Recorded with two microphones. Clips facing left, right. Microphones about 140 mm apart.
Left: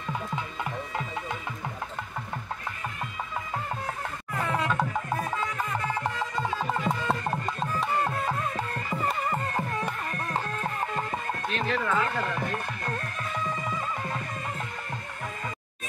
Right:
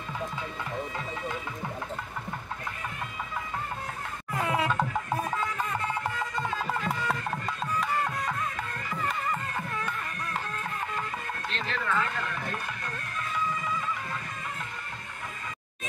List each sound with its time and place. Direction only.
4.4 s music: 10° right (ahead or behind)
6.0 s music: 20° left (ahead or behind); by 11.1 s 35° left (ahead or behind)
11.5 s a sound: 10° left (ahead or behind)
12.2 s music: 35° left (ahead or behind)